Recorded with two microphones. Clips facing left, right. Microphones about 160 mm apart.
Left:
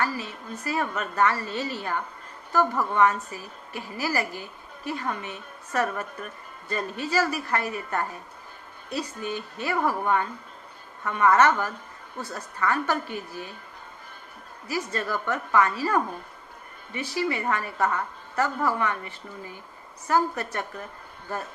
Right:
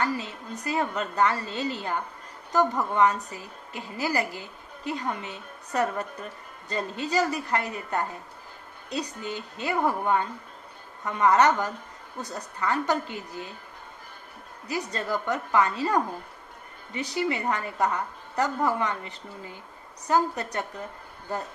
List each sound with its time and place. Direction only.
0.2 s a woman's voice: 20° right (ahead or behind)
14.9 s a woman's voice: 20° right (ahead or behind)
17.1 s a woman's voice: 20° right (ahead or behind)
20.1 s a woman's voice: 20° right (ahead or behind)